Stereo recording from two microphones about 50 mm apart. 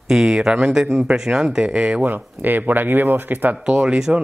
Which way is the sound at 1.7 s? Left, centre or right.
Right.